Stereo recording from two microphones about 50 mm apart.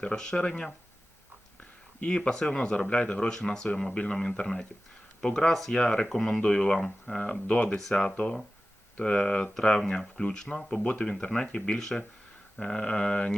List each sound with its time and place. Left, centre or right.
0.0 s speech: centre
2.0 s speech: centre
7.8 s speech: centre